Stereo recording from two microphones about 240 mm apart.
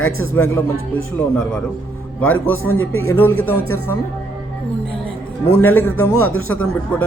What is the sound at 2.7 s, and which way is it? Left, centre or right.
Speech, left.